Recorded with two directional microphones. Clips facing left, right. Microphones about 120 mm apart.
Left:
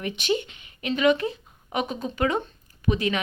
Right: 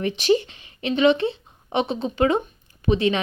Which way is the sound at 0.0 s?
35° right (ahead or behind).